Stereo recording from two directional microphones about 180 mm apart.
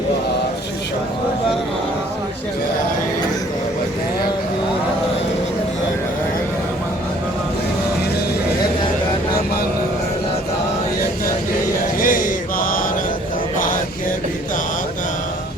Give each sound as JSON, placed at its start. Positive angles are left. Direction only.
{"t": 11.9, "sound": "mantra", "side_deg": 50}